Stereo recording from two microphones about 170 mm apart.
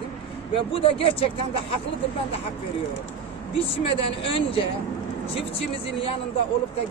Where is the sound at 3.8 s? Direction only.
30° left (ahead or behind).